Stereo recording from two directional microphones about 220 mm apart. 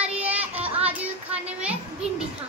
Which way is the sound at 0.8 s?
5° right (ahead or behind).